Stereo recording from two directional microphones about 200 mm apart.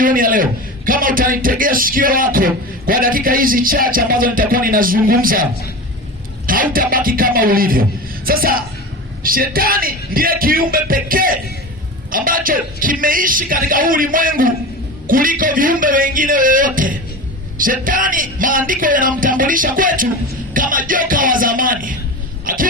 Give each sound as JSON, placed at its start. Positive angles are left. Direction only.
{"t": 0.0, "sound": "a man's voice", "side_deg": -45}